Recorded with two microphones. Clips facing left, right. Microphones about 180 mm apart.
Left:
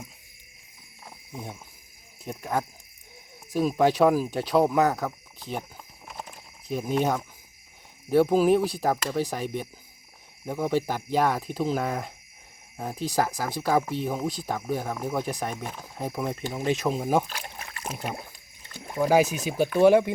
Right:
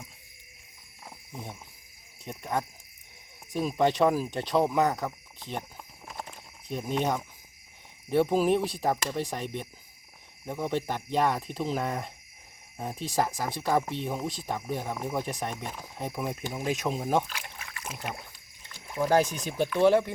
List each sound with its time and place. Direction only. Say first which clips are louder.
2.2 s speech: left 3 dB; centre (ahead or behind)
6.7 s speech: left 3 dB; 5° left (ahead or behind)
17.2 s trickle: left 3 dB; 40° left (ahead or behind)
17.9 s speech: left 4 dB; 10° left (ahead or behind)
18.2 s a sound: left 5 dB; 40° left (ahead or behind)
18.9 s speech: left 3 dB; 5° left (ahead or behind)